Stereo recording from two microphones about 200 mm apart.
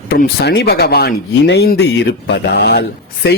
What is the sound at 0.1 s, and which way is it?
A man's voice, 50° left (ahead or behind).